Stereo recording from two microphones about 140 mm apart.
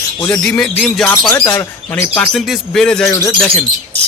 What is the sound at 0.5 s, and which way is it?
Speech, 10° left (ahead or behind).